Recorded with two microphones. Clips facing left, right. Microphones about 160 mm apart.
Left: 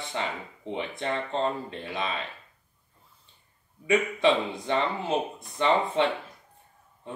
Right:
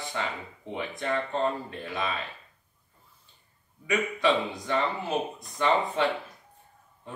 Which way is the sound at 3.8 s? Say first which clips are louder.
Left 3 dB; 25° left (ahead or behind).